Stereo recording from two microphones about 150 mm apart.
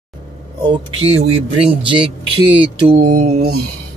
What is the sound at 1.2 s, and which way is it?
Speech, 40° right (ahead or behind).